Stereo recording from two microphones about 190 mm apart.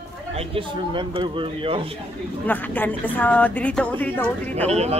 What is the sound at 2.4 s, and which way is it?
A woman's voice, 10° left (ahead or behind).